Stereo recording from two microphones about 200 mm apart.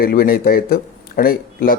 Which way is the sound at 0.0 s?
50° left (ahead or behind).